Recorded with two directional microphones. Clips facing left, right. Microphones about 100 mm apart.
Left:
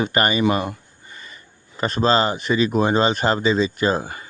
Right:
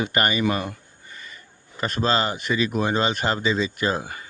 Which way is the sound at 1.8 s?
30° left (ahead or behind).